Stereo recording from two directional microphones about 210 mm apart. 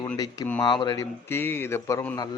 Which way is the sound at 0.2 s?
10° left (ahead or behind).